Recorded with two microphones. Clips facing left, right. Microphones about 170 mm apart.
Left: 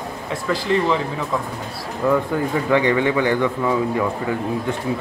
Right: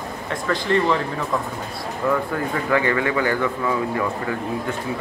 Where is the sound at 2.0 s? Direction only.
20° left (ahead or behind).